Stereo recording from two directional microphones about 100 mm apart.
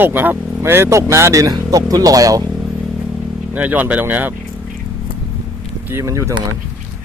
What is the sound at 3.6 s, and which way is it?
Speech, 15° right (ahead or behind).